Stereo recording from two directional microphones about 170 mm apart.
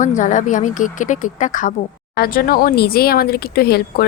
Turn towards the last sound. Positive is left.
turn(degrees=65)  # may be behind; listen again after turning